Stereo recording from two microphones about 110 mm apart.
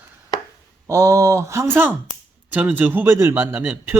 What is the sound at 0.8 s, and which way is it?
A man's voice, 30° right (ahead or behind).